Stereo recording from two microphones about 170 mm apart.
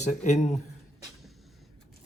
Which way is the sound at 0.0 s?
45° left (ahead or behind).